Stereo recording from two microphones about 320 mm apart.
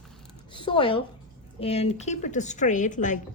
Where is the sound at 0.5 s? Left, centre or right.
Centre.